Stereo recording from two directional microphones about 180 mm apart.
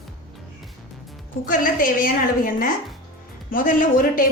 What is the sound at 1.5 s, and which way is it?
A woman's voice, 50° left (ahead or behind).